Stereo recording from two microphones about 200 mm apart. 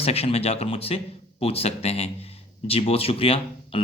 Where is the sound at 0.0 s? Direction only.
30° left (ahead or behind).